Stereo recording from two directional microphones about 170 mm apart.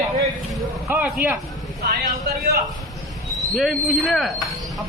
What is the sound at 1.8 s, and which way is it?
Vehicle, 70° right (ahead or behind).